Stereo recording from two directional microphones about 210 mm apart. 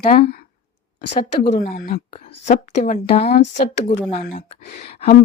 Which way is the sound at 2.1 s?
35° left (ahead or behind).